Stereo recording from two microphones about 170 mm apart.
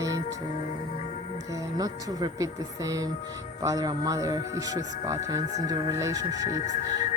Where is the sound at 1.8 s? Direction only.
20° right (ahead or behind).